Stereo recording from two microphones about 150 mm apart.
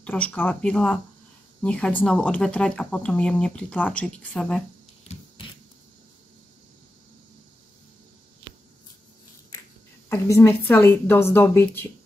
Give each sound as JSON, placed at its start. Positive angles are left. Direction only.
{"t": 0.0, "sound": "speech", "side_deg": 10}
{"t": 5.1, "sound": "a sound", "side_deg": 45}
{"t": 10.0, "sound": "a woman's voice", "side_deg": 20}